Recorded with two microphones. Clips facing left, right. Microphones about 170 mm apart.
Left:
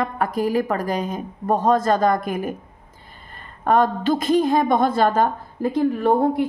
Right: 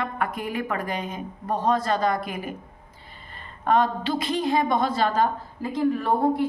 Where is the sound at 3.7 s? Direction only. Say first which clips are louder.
Left 4 dB; 45° left (ahead or behind).